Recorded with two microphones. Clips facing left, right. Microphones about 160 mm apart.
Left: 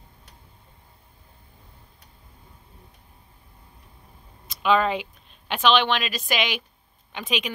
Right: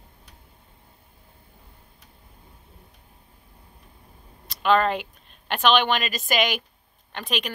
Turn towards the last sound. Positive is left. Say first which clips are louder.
# left 1 dB
turn(degrees=0)  # may be behind; listen again after turning